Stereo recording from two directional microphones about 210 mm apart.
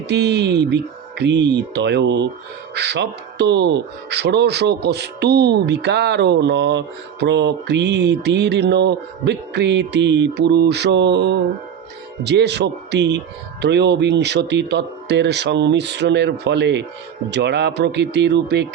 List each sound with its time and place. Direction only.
0.1 s speech: 55° right (ahead or behind)